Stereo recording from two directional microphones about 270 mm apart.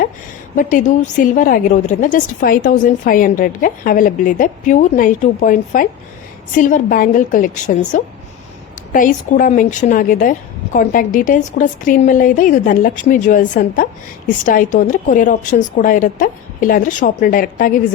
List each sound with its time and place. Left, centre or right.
0.5 s a woman's voice: left